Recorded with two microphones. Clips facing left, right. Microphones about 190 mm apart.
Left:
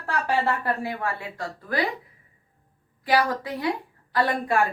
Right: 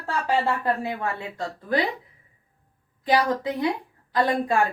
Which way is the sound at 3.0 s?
20° right (ahead or behind).